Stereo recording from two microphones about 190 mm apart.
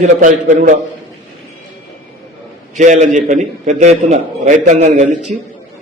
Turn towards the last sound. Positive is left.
turn(degrees=-40)  # may be behind; listen again after turning